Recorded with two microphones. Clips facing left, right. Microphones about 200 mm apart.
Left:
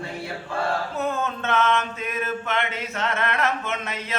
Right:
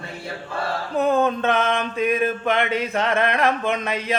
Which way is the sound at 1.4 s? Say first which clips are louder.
Right 2 dB; 15° right (ahead or behind).